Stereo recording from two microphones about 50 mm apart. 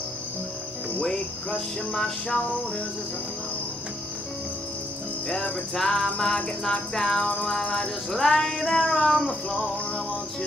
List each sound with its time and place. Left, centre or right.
1.0 s cricket: centre
5.3 s cricket: centre
7.6 s speech: left
8.1 s cricket: centre